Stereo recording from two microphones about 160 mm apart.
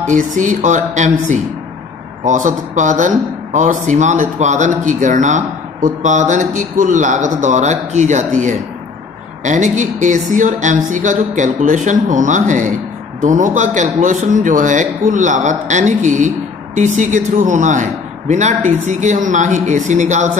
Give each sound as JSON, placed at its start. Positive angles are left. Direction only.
{"t": 0.1, "sound": "speech", "side_deg": -50}